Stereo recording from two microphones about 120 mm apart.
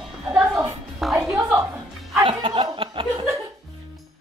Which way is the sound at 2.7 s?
45° right (ahead or behind).